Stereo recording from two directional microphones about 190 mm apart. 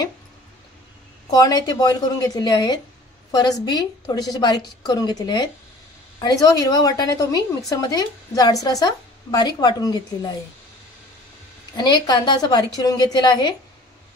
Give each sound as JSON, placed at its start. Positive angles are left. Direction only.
{"t": 1.3, "sound": "a woman's voice", "side_deg": 20}
{"t": 11.7, "sound": "a woman's voice", "side_deg": 20}